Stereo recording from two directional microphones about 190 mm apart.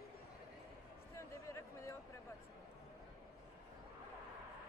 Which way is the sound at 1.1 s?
15° left (ahead or behind).